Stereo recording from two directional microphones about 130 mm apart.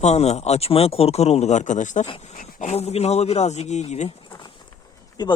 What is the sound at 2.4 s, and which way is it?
Speech, 60° left (ahead or behind).